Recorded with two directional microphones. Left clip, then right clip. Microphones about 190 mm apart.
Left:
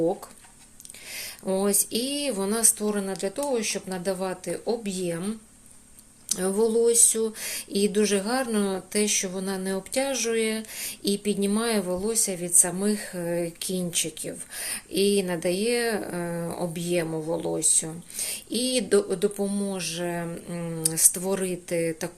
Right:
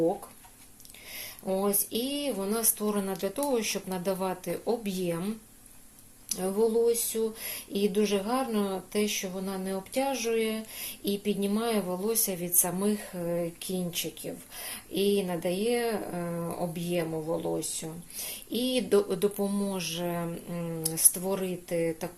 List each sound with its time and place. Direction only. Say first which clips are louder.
1.1 s speech: left 3 dB; 20° left (ahead or behind)
6.2 s speech: left 3 dB; 20° left (ahead or behind)